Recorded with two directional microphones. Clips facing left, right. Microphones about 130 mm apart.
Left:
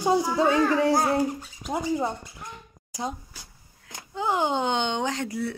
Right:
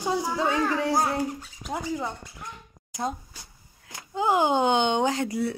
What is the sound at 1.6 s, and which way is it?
Speech, 15° left (ahead or behind).